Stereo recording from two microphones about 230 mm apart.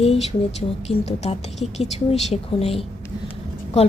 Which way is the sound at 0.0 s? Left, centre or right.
Left.